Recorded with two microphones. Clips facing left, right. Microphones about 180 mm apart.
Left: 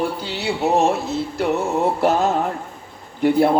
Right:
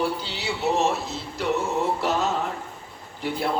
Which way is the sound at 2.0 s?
50° left (ahead or behind).